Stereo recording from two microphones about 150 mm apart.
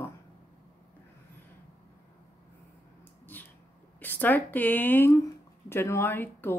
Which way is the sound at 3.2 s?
10° left (ahead or behind).